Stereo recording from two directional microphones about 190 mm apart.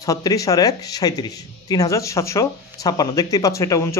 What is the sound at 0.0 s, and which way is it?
Speech, 20° left (ahead or behind).